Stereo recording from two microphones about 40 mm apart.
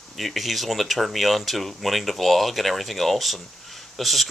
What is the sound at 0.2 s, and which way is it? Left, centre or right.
Speech, centre.